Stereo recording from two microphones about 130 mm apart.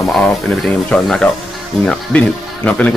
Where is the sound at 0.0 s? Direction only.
Centre (ahead or behind).